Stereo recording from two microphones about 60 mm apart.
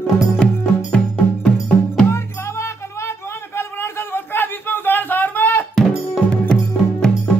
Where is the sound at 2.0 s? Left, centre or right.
Left.